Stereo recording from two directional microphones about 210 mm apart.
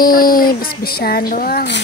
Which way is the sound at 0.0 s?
45° left (ahead or behind).